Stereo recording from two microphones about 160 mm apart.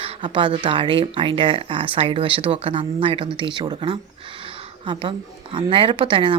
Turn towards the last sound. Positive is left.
turn(degrees=-30)  # may be behind; listen again after turning